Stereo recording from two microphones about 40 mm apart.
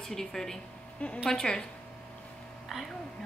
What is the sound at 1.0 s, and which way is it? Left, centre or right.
Speech, left.